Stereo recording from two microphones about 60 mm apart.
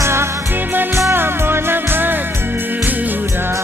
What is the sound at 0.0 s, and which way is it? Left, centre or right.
Music, right.